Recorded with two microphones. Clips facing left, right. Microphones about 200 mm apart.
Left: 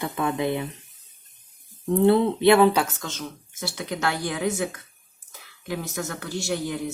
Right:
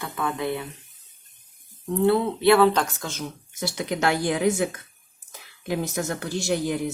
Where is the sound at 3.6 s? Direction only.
20° right (ahead or behind).